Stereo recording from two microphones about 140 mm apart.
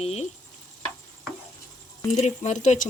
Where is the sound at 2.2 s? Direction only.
55° left (ahead or behind).